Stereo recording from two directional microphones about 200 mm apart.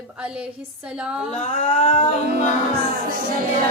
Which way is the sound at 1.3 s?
35° left (ahead or behind).